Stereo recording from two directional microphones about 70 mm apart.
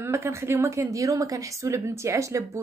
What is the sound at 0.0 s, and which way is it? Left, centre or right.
A woman's voice, right.